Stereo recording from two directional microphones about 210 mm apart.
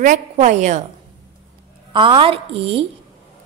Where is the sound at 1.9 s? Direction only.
25° right (ahead or behind).